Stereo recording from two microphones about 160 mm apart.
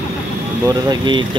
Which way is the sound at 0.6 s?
25° right (ahead or behind).